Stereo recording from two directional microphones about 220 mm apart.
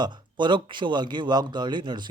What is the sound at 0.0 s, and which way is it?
Speech, 20° right (ahead or behind).